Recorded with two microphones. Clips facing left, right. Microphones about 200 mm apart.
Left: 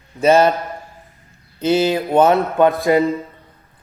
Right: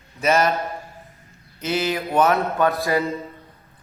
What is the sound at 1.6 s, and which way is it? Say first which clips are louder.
Speech: left 7 dB; 30° left (ahead or behind).